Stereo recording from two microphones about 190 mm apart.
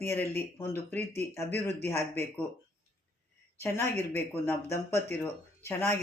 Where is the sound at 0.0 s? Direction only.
10° left (ahead or behind).